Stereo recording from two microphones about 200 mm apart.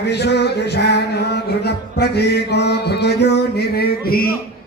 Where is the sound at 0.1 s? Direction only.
55° left (ahead or behind).